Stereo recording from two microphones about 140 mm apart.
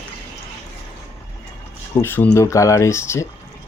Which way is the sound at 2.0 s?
15° left (ahead or behind).